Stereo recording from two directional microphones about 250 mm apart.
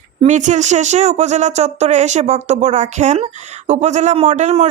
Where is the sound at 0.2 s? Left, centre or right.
Right.